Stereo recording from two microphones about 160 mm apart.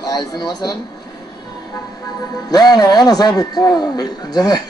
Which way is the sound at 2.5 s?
25° left (ahead or behind).